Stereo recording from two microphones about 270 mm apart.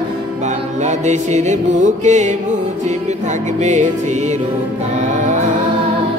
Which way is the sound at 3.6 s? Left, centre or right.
Right.